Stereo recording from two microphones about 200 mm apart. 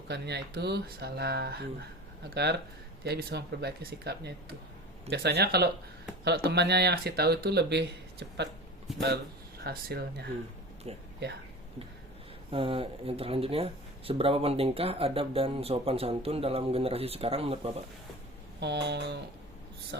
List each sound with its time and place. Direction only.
0.1 s speech: 55° right (ahead or behind)
8.9 s speech: centre (ahead or behind)
9.6 s speech: 55° right (ahead or behind)
10.8 s speech: 30° right (ahead or behind)
12.5 s speech: 25° right (ahead or behind)
18.6 s speech: 60° right (ahead or behind)